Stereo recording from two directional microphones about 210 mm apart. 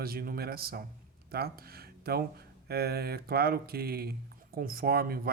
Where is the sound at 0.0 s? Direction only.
45° right (ahead or behind).